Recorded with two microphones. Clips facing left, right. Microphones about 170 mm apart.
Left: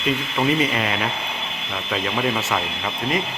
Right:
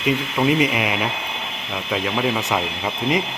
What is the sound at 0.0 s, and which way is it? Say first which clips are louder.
Speech: right 2 dB; 10° right (ahead or behind).